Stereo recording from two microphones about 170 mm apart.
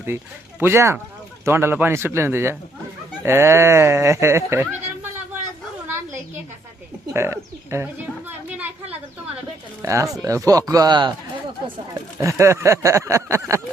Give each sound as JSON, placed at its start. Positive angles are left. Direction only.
{"t": 0.6, "sound": "speech", "side_deg": -15}
{"t": 7.1, "sound": "speech", "side_deg": -15}
{"t": 8.5, "sound": "a sound", "side_deg": -10}
{"t": 9.8, "sound": "speech", "side_deg": -20}
{"t": 12.2, "sound": "speech", "side_deg": -15}